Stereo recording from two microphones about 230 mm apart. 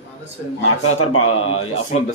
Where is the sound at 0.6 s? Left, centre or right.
Left.